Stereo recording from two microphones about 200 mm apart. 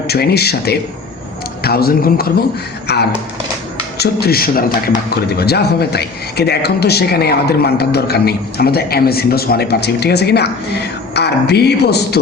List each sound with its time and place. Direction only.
0.1 s a man's voice: 50° left (ahead or behind)